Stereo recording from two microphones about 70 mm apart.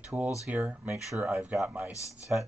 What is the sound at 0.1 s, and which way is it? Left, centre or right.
Speech, right.